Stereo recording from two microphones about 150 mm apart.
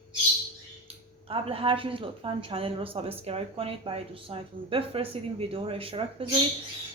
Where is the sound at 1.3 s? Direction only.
35° right (ahead or behind).